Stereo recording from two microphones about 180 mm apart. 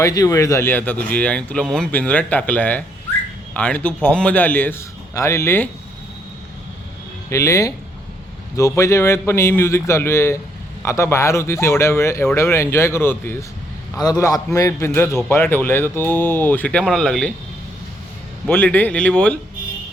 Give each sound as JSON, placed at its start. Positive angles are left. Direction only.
{"t": 0.0, "sound": "a man's voice", "side_deg": 20}
{"t": 7.3, "sound": "a man's voice", "side_deg": 15}
{"t": 18.4, "sound": "a man's voice", "side_deg": 10}